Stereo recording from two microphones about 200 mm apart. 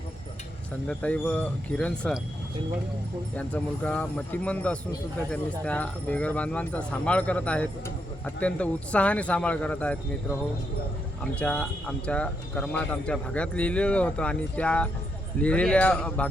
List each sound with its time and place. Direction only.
0.9 s speech: 5° left (ahead or behind)
3.3 s speech: 5° left (ahead or behind)
11.2 s speech: 5° left (ahead or behind)